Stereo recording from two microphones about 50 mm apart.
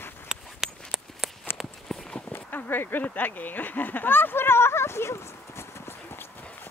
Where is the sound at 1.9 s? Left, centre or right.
Centre.